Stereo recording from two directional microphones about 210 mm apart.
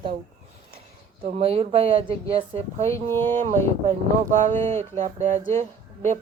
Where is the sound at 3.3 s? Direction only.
35° right (ahead or behind).